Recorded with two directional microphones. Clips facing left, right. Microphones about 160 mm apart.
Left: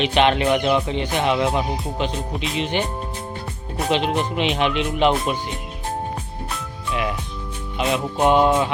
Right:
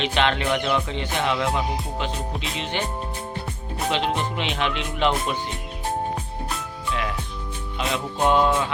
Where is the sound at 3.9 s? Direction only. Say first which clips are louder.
Left 4 dB; 15° left (ahead or behind).